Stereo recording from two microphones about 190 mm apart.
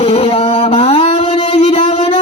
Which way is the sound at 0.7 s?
30° left (ahead or behind).